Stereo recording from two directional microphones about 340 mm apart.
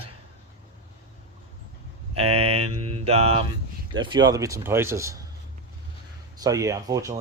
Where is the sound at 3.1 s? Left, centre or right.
Centre.